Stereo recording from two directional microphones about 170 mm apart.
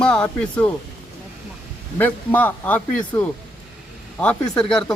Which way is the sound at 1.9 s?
10° left (ahead or behind).